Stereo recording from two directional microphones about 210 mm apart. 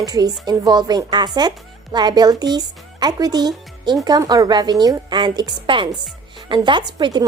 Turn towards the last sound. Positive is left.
turn(degrees=-20)  # may be behind; listen again after turning